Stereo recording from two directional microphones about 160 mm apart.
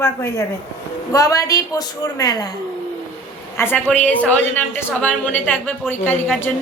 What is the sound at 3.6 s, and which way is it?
Speech, 10° left (ahead or behind).